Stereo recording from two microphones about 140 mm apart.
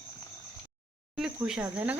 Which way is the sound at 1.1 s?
5° right (ahead or behind).